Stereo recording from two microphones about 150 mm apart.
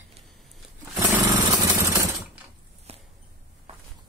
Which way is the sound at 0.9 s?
10° right (ahead or behind).